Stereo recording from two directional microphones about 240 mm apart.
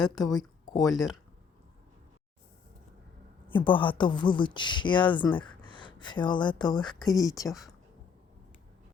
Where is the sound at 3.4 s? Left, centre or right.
Centre.